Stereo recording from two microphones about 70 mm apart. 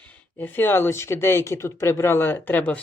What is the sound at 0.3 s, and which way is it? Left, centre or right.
Speech, left.